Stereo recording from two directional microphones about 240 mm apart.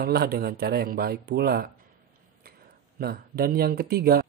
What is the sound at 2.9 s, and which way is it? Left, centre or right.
Speech, right.